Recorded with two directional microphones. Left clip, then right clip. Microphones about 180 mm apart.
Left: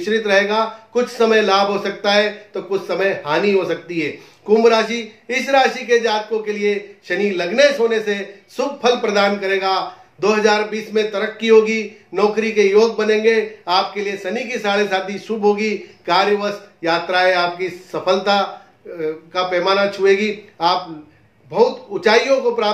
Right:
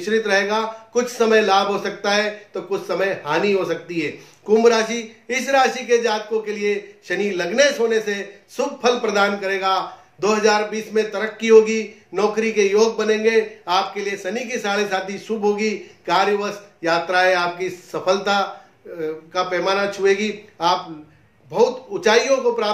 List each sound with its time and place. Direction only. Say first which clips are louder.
0.0 s a man's voice: left 3 dB; 15° left (ahead or behind)